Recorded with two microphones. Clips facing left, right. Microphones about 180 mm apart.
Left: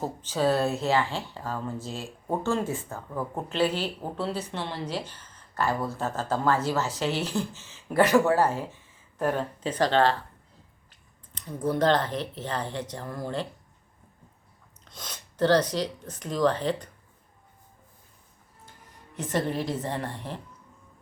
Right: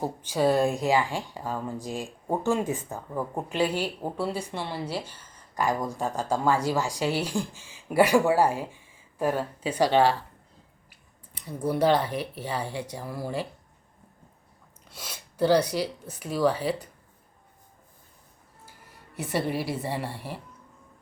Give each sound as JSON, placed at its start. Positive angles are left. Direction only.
{"t": 0.0, "sound": "speech", "side_deg": -10}
{"t": 11.3, "sound": "speech", "side_deg": -10}
{"t": 14.8, "sound": "speech", "side_deg": -10}
{"t": 19.1, "sound": "speech", "side_deg": -10}